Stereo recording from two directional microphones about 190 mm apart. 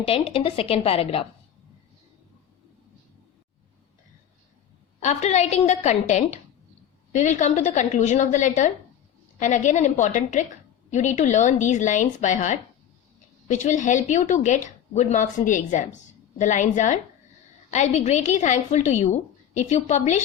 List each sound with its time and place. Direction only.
0.0 s a woman's voice: 30° left (ahead or behind)
4.9 s a woman's voice: 35° left (ahead or behind)